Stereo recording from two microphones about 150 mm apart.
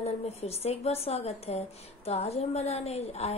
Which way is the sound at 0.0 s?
45° left (ahead or behind).